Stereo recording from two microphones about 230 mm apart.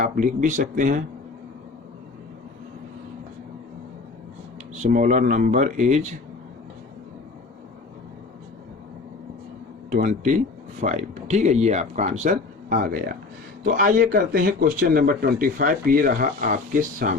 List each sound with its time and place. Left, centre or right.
0.0 s speech: right
4.8 s speech: right
9.9 s speech: right